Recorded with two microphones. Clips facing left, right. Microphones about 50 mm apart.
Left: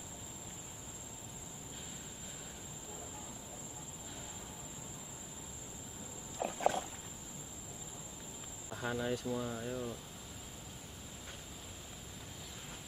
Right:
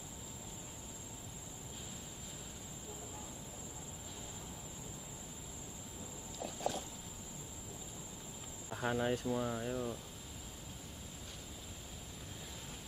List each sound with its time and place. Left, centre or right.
6.3 s a sound: left
8.7 s speech: right
9.6 s speech: centre